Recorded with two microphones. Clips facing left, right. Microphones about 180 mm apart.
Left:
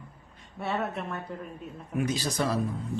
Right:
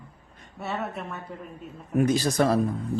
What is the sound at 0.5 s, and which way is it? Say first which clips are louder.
Speech: left 1 dB; centre (ahead or behind).